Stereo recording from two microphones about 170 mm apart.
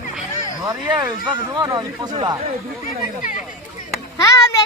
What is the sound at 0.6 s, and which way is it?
Speech, 25° right (ahead or behind).